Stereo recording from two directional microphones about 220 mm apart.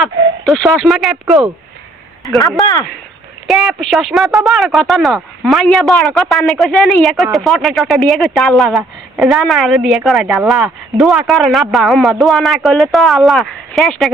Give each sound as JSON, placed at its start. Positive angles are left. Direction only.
{"t": 0.0, "sound": "speech", "side_deg": 0}
{"t": 2.6, "sound": "speech", "side_deg": 20}
{"t": 3.4, "sound": "speech", "side_deg": 0}